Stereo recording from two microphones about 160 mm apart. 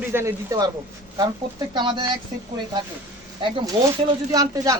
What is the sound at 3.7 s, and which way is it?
Speech, 30° right (ahead or behind).